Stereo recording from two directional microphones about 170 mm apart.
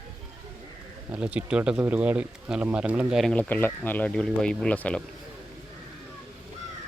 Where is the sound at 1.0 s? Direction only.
5° right (ahead or behind).